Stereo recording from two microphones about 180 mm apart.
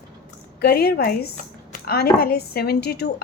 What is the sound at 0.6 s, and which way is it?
Speech, 60° left (ahead or behind).